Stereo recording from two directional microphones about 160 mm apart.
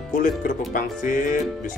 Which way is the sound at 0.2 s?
55° left (ahead or behind).